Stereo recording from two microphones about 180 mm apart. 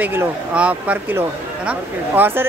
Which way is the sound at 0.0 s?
10° right (ahead or behind).